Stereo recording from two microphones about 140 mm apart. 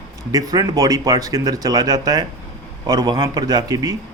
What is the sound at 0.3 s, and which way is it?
A man's voice, 25° right (ahead or behind).